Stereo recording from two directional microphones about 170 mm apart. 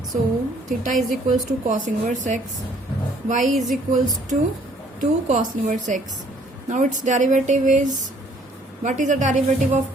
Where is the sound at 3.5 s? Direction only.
Centre (ahead or behind).